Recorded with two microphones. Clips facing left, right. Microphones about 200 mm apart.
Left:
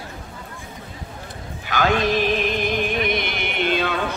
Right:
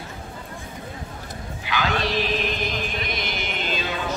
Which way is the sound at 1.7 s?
45° left (ahead or behind).